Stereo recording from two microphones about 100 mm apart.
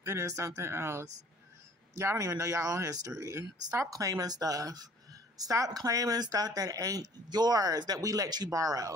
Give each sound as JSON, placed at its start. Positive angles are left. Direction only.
{"t": 0.0, "sound": "a woman's voice", "side_deg": -25}